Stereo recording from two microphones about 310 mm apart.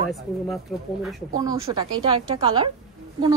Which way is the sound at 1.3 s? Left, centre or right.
Centre.